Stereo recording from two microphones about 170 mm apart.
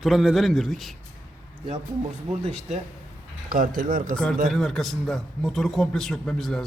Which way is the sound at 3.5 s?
55° right (ahead or behind).